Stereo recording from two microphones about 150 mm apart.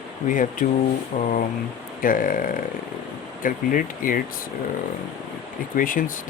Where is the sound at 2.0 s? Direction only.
65° left (ahead or behind).